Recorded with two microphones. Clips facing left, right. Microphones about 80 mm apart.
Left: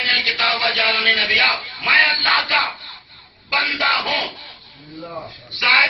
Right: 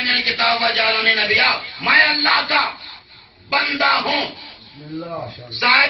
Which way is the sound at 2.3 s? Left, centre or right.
Right.